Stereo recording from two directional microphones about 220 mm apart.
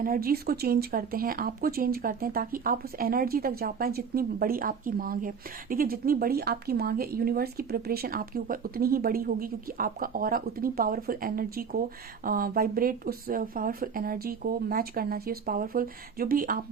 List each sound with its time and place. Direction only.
0.0 s speech: 40° right (ahead or behind)